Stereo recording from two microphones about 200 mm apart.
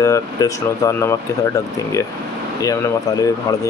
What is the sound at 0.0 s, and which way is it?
Speech, 15° left (ahead or behind).